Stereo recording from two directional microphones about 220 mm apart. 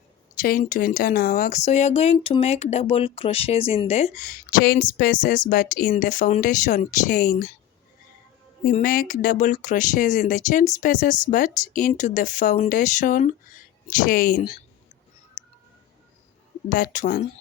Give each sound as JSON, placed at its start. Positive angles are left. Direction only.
{"t": 0.4, "sound": "speech", "side_deg": 40}
{"t": 8.6, "sound": "speech", "side_deg": 40}
{"t": 16.6, "sound": "speech", "side_deg": 40}